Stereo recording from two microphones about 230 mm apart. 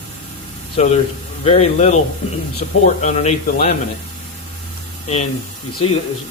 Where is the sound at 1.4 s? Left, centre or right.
Left.